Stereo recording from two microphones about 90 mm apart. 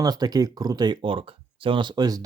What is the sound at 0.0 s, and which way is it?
Speech, 45° right (ahead or behind).